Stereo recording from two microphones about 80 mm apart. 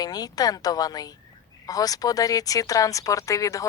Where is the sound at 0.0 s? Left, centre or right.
Left.